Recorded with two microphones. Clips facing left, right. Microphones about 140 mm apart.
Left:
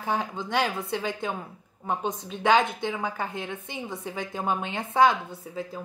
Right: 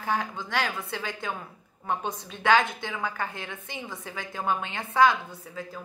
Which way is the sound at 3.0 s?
15° left (ahead or behind).